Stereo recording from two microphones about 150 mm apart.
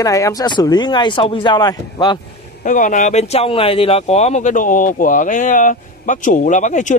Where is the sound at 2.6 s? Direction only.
60° left (ahead or behind).